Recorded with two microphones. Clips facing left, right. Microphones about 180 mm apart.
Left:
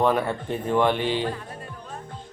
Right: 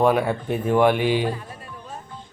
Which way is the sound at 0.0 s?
10° right (ahead or behind).